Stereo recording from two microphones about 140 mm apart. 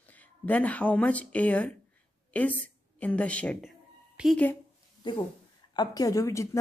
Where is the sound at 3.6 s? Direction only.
5° right (ahead or behind).